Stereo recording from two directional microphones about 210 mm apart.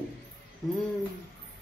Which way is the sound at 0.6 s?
Centre (ahead or behind).